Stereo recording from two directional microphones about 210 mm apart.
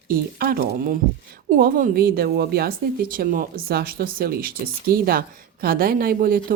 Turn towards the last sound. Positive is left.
turn(degrees=-45)  # may be behind; listen again after turning